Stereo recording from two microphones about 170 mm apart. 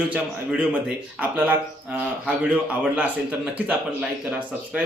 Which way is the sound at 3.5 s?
5° right (ahead or behind).